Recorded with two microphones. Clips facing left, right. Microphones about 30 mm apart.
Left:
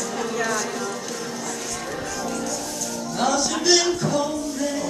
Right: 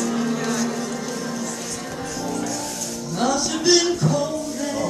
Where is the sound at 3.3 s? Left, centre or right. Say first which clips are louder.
Right 2 dB; centre.